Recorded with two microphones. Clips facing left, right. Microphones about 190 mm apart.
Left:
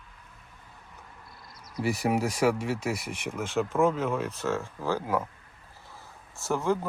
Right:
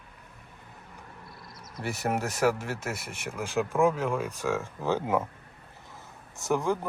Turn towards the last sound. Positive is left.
turn(degrees=-15)  # may be behind; listen again after turning